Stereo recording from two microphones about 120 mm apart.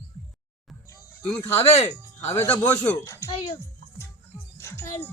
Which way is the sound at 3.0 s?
25° left (ahead or behind).